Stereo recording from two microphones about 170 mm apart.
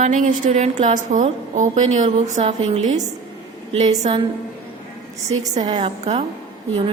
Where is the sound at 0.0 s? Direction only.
50° right (ahead or behind).